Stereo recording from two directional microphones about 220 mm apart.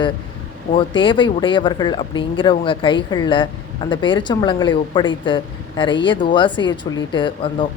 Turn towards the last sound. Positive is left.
turn(degrees=20)  # may be behind; listen again after turning